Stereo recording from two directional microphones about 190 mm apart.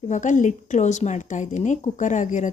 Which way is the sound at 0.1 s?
40° left (ahead or behind).